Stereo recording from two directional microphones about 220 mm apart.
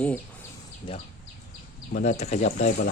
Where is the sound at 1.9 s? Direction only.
30° left (ahead or behind).